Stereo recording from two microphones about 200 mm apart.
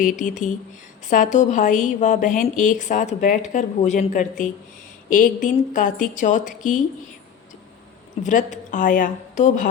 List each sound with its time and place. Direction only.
0.0 s a woman's voice: 40° left (ahead or behind)
8.2 s a woman's voice: 40° left (ahead or behind)